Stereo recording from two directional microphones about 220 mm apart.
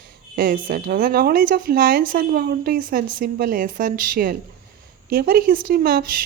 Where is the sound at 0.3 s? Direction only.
40° right (ahead or behind).